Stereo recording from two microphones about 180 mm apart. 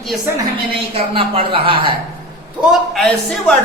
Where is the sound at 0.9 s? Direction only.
30° right (ahead or behind).